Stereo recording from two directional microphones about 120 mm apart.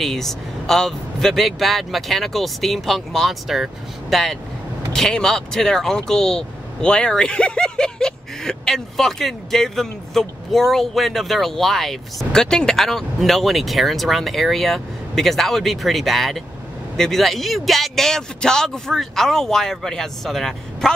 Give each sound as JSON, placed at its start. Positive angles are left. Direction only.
{"t": 0.0, "sound": "speech", "side_deg": 5}